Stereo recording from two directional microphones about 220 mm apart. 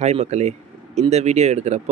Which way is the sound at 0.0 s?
30° right (ahead or behind).